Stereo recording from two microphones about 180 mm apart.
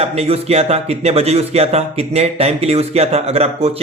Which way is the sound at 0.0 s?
35° right (ahead or behind).